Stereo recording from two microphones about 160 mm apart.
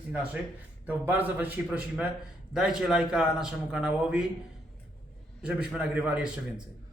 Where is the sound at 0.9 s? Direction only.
10° right (ahead or behind).